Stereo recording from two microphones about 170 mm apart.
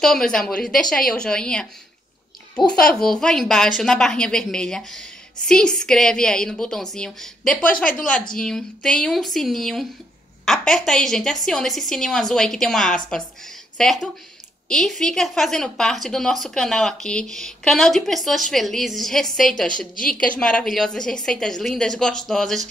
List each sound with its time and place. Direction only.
0.0 s a woman's voice: 5° left (ahead or behind)
2.8 s a woman's voice: 5° left (ahead or behind)